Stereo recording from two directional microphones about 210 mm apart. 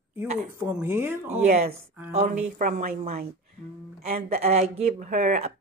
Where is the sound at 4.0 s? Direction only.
30° right (ahead or behind).